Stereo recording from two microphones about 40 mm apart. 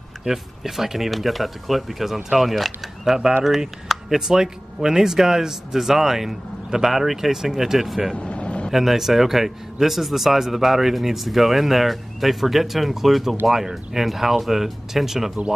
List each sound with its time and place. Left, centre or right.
0.2 s speech: centre
8.2 s vehicle: left
8.7 s speech: centre